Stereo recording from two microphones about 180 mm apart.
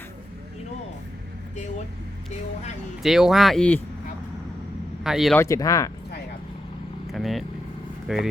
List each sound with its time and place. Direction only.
3.0 s speech: centre (ahead or behind)
5.0 s speech: centre (ahead or behind)
5.4 s speech: 20° left (ahead or behind)
7.1 s speech: centre (ahead or behind)